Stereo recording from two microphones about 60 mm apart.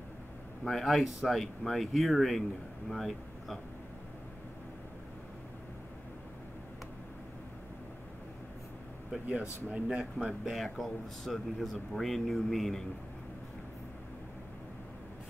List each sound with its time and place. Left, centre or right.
0.7 s speech: centre
9.3 s speech: right
9.8 s speech: centre